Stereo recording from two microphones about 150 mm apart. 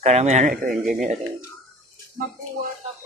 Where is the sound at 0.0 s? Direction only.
50° right (ahead or behind).